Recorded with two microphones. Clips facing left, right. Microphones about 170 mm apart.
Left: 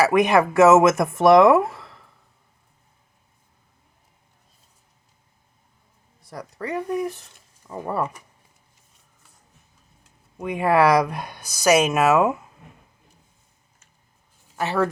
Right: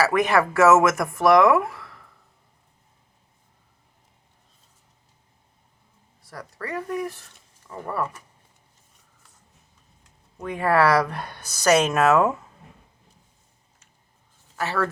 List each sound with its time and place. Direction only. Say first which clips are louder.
0.0 s speech: left 3 dB; 20° left (ahead or behind)
6.2 s speech: left 3 dB; 20° left (ahead or behind)
10.0 s speech: left 3 dB; 15° left (ahead or behind)
14.5 s speech: left 3 dB; 20° left (ahead or behind)